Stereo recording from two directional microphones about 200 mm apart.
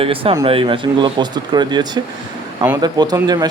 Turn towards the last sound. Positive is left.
turn(degrees=-20)  # may be behind; listen again after turning